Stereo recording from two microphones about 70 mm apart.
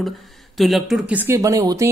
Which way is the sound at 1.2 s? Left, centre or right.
Right.